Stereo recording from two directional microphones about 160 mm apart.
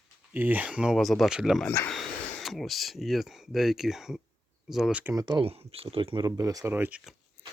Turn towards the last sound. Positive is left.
turn(degrees=10)  # may be behind; listen again after turning